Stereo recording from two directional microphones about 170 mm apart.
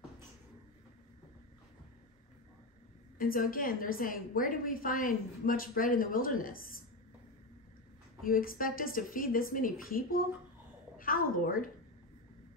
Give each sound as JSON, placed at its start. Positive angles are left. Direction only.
{"t": 3.2, "sound": "a woman's voice", "side_deg": 55}
{"t": 8.2, "sound": "a woman's voice", "side_deg": 55}